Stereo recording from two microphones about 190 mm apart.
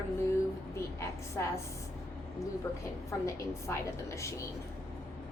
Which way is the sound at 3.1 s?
15° left (ahead or behind).